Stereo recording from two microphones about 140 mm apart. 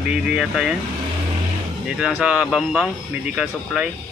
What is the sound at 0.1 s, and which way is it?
Speech, 5° right (ahead or behind).